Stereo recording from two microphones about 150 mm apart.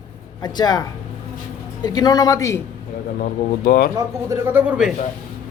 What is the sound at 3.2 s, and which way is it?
Speech, 75° left (ahead or behind).